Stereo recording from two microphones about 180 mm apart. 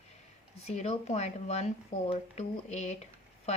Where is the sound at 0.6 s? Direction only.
35° left (ahead or behind).